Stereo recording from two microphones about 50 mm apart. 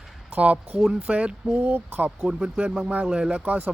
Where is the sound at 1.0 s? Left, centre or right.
Right.